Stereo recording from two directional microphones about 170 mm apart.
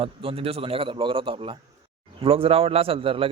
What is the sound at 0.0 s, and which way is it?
A man's voice, 30° right (ahead or behind).